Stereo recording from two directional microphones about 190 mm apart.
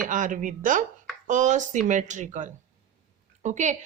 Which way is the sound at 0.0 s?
45° right (ahead or behind).